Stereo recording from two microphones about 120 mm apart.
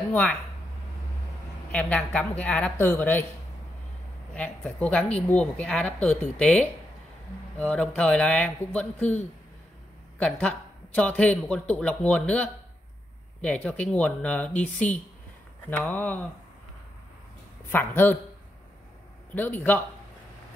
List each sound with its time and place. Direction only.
0.1 s speech: 10° left (ahead or behind)
1.7 s a woman's voice: 10° left (ahead or behind)
4.3 s a woman's voice: 10° left (ahead or behind)
10.1 s a woman's voice: 10° left (ahead or behind)
17.6 s a woman's voice: 15° left (ahead or behind)
19.3 s a woman's voice: 15° left (ahead or behind)